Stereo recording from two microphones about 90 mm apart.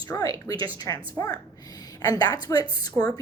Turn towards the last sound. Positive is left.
turn(degrees=45)  # may be behind; listen again after turning